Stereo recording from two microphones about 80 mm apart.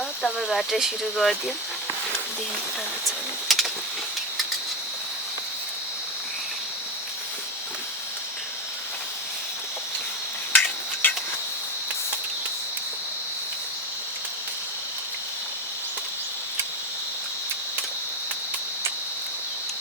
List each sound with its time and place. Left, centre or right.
0.2 s speech: centre
3.5 s a sound: centre
10.5 s tick-tock: left